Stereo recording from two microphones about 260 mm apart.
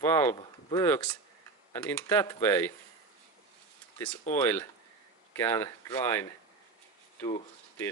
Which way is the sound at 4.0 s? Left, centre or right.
Centre.